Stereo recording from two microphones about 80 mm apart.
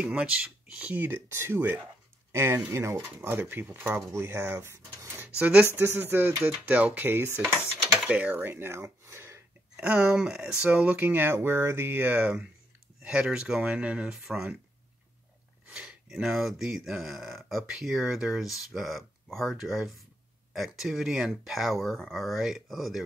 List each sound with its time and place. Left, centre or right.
0.0 s speech: centre
2.3 s speech: right
5.4 s speech: centre
5.8 s speech: right
8.0 s speech: centre; by 8.8 s right
9.0 s a sound: right
9.8 s speech: centre
13.0 s speech: centre
15.6 s a sound: centre
16.1 s speech: centre